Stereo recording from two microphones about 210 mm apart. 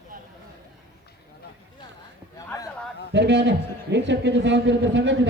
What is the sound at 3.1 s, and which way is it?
A man's voice, 55° right (ahead or behind).